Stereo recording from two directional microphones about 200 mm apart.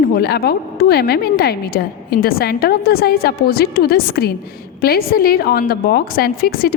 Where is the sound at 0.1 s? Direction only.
50° left (ahead or behind).